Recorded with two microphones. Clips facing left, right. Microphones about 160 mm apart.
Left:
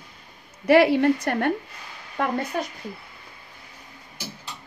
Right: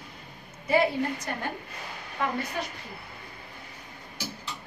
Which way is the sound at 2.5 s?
45° left (ahead or behind).